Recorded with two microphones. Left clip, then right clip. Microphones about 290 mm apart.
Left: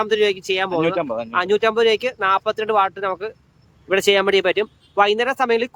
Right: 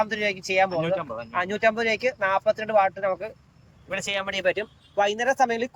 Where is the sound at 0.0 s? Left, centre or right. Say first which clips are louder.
Left 7 dB; centre.